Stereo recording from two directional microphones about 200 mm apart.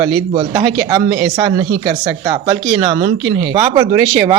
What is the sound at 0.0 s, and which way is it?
Speech, 20° right (ahead or behind).